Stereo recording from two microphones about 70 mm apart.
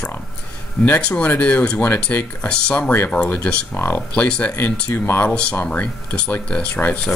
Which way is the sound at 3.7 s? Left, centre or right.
Left.